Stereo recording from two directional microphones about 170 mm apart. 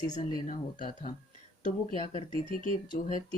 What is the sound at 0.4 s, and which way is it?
Speech, 45° left (ahead or behind).